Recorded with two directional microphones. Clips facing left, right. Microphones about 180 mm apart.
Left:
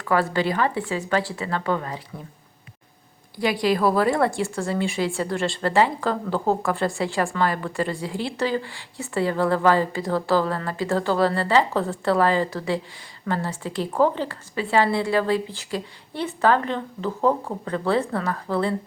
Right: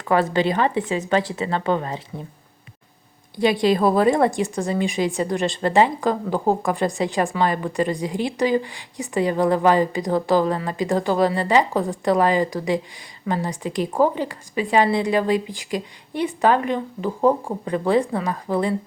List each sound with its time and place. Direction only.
0.0 s a woman's voice: 20° right (ahead or behind)
3.3 s a woman's voice: 25° right (ahead or behind)